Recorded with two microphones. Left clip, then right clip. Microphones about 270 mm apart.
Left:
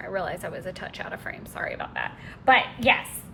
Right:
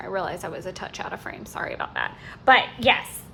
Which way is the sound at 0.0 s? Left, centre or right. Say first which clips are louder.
Right 1 dB; centre.